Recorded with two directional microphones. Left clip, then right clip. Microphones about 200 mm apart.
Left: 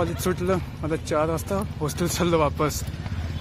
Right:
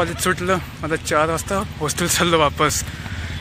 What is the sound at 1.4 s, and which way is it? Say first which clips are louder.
Speech: right 5 dB; 20° right (ahead or behind).